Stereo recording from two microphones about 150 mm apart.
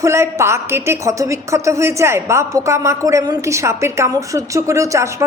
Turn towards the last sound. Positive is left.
turn(degrees=-20)  # may be behind; listen again after turning